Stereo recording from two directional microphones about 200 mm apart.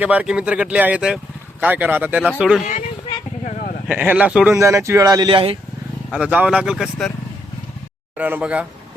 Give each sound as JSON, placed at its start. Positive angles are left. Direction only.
{"t": 0.0, "sound": "speech", "side_deg": -5}
{"t": 3.4, "sound": "sheep", "side_deg": 40}
{"t": 3.8, "sound": "speech", "side_deg": -10}
{"t": 6.1, "sound": "speech", "side_deg": -5}
{"t": 8.2, "sound": "speech", "side_deg": -5}